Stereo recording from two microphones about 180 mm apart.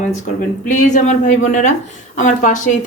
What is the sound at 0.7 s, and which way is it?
A woman's voice, 45° left (ahead or behind).